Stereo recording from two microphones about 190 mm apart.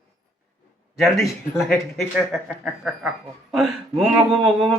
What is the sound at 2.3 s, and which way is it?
Speech, centre (ahead or behind).